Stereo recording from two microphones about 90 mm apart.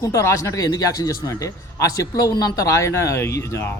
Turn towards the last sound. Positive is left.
turn(degrees=30)  # may be behind; listen again after turning